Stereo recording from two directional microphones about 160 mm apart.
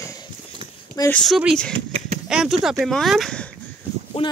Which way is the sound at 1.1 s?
Centre (ahead or behind).